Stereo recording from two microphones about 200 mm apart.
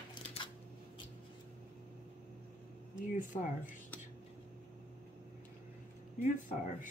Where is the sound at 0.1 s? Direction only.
25° left (ahead or behind).